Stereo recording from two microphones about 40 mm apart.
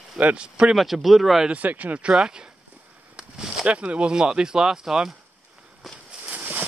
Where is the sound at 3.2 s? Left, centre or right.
Centre.